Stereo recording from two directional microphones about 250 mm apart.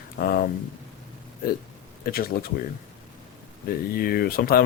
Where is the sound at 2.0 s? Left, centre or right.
Left.